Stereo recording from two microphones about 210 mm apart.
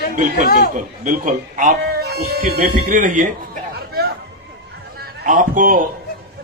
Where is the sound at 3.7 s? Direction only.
50° right (ahead or behind).